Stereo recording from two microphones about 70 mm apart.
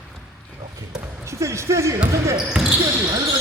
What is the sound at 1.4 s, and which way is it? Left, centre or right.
Speech, right.